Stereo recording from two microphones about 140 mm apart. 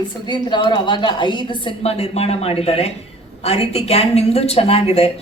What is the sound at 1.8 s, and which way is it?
A woman's voice, 45° left (ahead or behind).